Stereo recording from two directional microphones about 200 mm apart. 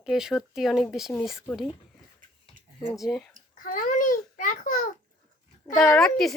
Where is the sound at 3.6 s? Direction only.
40° left (ahead or behind).